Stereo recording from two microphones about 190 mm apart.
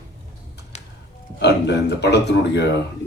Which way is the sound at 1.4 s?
60° left (ahead or behind).